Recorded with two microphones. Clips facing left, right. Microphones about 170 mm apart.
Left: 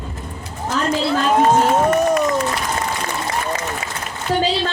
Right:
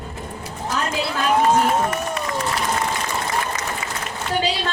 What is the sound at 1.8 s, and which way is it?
Crowd, 45° left (ahead or behind).